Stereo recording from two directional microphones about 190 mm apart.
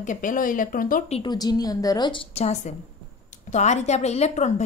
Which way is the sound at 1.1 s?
20° left (ahead or behind).